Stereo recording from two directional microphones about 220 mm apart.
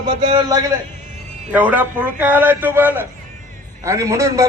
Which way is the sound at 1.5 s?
5° right (ahead or behind).